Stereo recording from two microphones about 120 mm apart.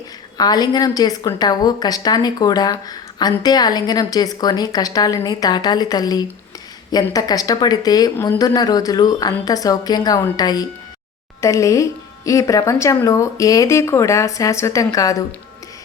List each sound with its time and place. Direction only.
0.3 s speech: 35° left (ahead or behind)